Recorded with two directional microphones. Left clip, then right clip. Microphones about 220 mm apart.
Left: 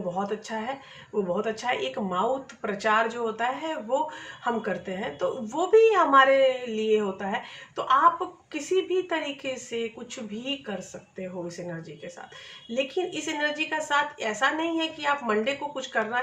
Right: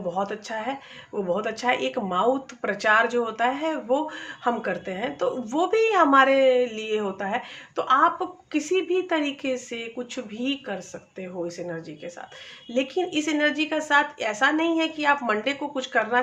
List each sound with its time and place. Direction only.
0.2 s speech: 45° right (ahead or behind)
12.7 s speech: 45° right (ahead or behind)